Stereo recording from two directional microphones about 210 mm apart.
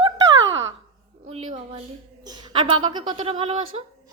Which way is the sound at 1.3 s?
25° right (ahead or behind).